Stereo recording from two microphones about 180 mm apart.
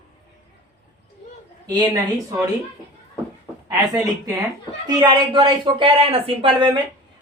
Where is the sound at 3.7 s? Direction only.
20° right (ahead or behind).